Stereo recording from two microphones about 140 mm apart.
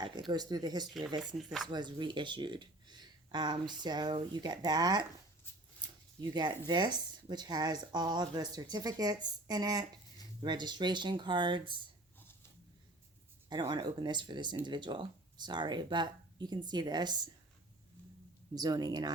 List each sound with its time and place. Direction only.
0.3 s speech: 30° right (ahead or behind)
1.4 s speech: centre (ahead or behind)
1.6 s speech: 30° right (ahead or behind)
6.3 s speech: 35° right (ahead or behind)
13.5 s speech: 35° right (ahead or behind)
18.5 s speech: 30° right (ahead or behind)